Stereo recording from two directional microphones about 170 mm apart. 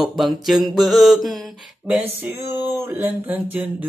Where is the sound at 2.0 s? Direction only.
15° right (ahead or behind).